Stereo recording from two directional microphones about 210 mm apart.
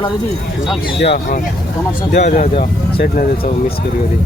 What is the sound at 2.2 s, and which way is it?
Speech, 30° left (ahead or behind).